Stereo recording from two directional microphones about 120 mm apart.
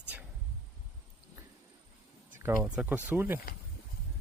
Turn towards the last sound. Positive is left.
turn(degrees=-15)  # may be behind; listen again after turning